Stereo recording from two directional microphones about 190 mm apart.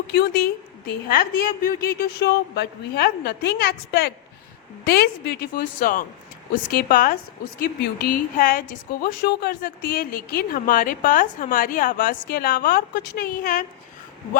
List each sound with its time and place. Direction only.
0.1 s a woman's voice: 55° left (ahead or behind)